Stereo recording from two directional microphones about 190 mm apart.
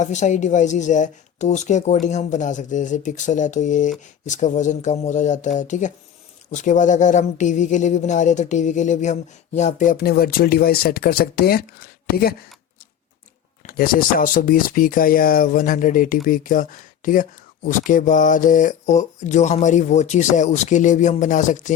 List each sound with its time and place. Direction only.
0.0 s speech: 40° left (ahead or behind)
13.6 s speech: 50° left (ahead or behind)